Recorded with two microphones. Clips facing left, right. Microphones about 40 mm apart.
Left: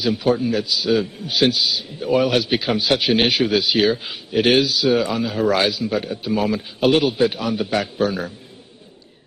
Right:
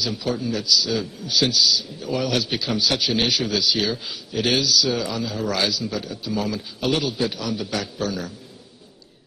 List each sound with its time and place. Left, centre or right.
0.0 s a man's voice: left